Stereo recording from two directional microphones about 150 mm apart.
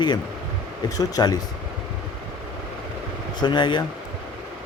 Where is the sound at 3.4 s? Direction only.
30° left (ahead or behind).